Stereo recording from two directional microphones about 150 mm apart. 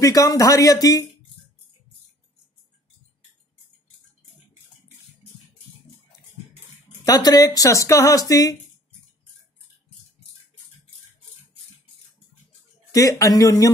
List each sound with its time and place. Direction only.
0.0 s speech: 25° left (ahead or behind)
7.1 s speech: 25° left (ahead or behind)
12.9 s speech: 20° left (ahead or behind)